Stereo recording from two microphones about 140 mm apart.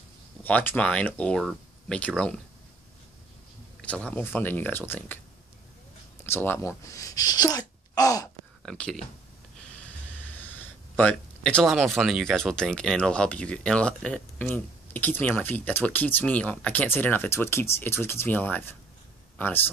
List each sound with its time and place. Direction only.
0.4 s speech: 15° left (ahead or behind)
3.8 s speech: 10° left (ahead or behind)
6.2 s speech: 15° left (ahead or behind)
8.6 s speech: 5° left (ahead or behind)
11.0 s speech: 10° left (ahead or behind)